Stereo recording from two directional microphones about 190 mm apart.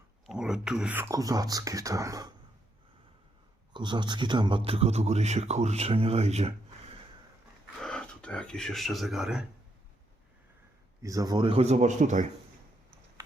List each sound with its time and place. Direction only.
0.3 s speech: 5° right (ahead or behind)
3.7 s speech: 25° right (ahead or behind)
7.8 s speech: 5° left (ahead or behind)
11.0 s speech: 20° right (ahead or behind); by 12.2 s 40° right (ahead or behind)